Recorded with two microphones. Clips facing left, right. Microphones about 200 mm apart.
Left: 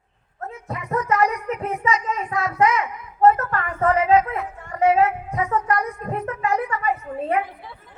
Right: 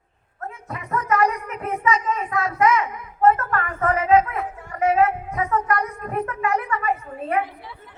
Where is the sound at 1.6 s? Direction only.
30° left (ahead or behind).